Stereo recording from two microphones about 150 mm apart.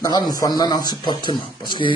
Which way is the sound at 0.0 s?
25° left (ahead or behind).